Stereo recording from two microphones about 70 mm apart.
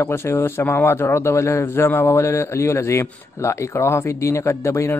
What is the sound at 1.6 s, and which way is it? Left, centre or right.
A man's voice, left.